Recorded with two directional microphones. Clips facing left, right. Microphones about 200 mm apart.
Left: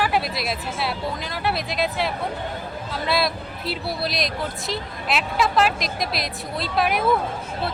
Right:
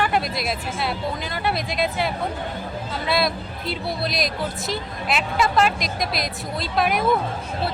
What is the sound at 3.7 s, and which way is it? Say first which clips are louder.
Speech: right 1 dB; centre (ahead or behind).